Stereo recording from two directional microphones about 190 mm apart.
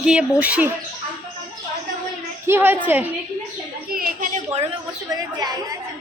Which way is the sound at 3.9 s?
50° right (ahead or behind).